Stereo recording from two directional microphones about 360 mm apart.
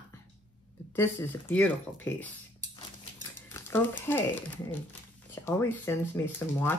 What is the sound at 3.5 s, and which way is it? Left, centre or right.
Speech, centre.